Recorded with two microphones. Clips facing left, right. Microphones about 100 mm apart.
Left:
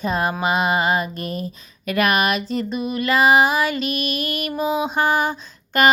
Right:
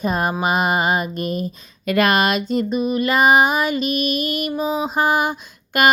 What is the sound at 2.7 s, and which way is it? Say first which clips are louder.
Mantra: right 1 dB; 5° right (ahead or behind).